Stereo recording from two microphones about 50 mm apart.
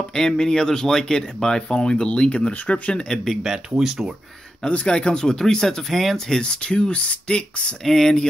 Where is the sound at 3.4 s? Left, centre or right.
Centre.